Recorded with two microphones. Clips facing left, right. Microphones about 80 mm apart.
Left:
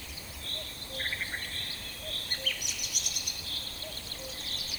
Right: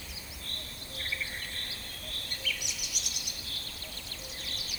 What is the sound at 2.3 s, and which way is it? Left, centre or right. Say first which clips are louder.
Bird vocalization: right 1 dB; left.